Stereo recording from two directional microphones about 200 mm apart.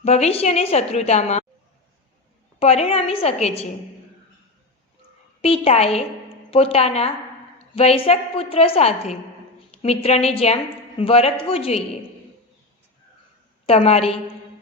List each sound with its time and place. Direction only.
0.0 s a woman's voice: 30° left (ahead or behind)
2.6 s a woman's voice: 30° left (ahead or behind)
5.4 s a woman's voice: 30° left (ahead or behind)
13.7 s a woman's voice: 30° left (ahead or behind)